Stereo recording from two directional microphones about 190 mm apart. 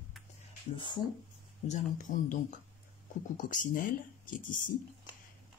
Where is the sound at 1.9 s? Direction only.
45° left (ahead or behind).